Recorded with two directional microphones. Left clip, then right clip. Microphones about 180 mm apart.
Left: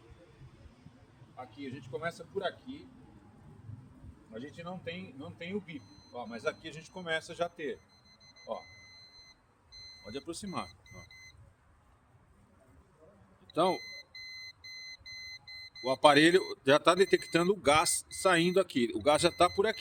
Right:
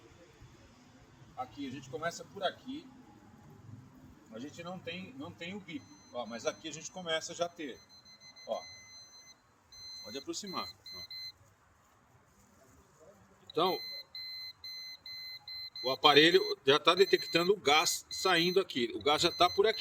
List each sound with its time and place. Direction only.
1.4 s speech: 25° left (ahead or behind)
4.4 s speech: 20° left (ahead or behind)
10.0 s speech: 60° left (ahead or behind)
13.5 s speech: 70° left (ahead or behind)
15.8 s speech: 70° left (ahead or behind)